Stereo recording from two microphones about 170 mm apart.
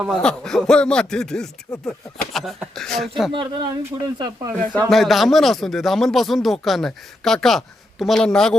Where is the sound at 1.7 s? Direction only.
20° left (ahead or behind).